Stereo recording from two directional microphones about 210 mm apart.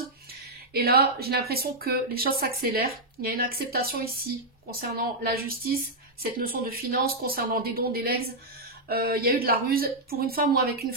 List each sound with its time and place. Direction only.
0.7 s speech: 45° right (ahead or behind)